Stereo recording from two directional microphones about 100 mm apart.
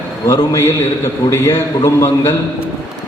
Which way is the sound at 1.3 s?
30° left (ahead or behind).